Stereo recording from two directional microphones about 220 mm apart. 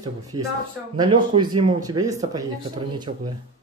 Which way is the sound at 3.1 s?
35° right (ahead or behind).